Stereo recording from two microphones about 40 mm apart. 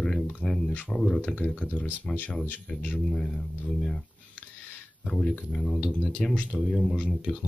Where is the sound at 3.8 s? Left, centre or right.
Centre.